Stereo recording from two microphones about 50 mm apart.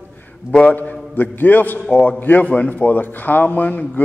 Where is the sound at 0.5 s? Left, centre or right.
Left.